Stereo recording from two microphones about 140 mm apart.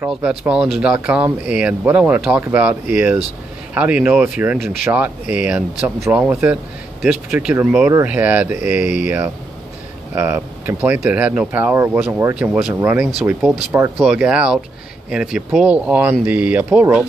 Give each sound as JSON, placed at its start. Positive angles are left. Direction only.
{"t": 0.0, "sound": "speech", "side_deg": -5}
{"t": 12.5, "sound": "speech", "side_deg": -5}